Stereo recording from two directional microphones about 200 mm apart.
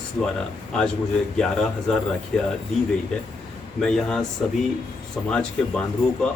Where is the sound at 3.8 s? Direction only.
5° left (ahead or behind).